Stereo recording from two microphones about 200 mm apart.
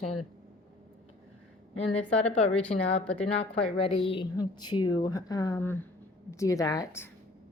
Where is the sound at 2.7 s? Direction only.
35° left (ahead or behind).